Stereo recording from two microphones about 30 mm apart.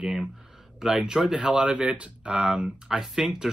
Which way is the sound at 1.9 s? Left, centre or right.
Right.